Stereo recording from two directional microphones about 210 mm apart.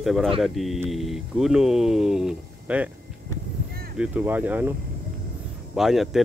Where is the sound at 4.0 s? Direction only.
5° right (ahead or behind).